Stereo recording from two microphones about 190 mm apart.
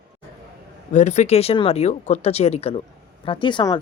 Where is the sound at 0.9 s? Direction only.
35° left (ahead or behind).